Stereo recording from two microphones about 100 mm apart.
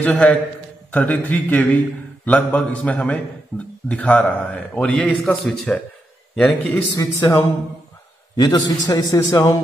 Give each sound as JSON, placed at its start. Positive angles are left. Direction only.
{"t": 0.1, "sound": "a man's voice", "side_deg": 5}
{"t": 7.0, "sound": "a man's voice", "side_deg": 30}